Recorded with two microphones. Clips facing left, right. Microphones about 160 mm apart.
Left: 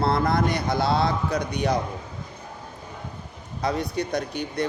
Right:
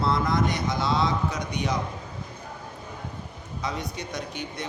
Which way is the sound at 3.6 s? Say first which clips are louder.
Left 7 dB; 65° left (ahead or behind).